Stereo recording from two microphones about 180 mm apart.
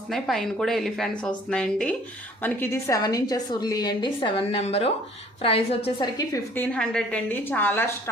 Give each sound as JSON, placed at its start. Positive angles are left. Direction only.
{"t": 0.1, "sound": "a woman's voice", "side_deg": 0}
{"t": 6.1, "sound": "a woman's voice", "side_deg": 15}